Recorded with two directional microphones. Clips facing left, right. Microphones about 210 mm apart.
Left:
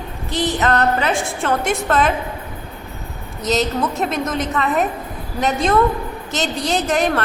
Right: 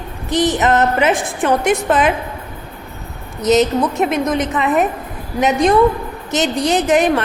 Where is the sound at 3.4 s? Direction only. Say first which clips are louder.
Right 6 dB; 20° right (ahead or behind).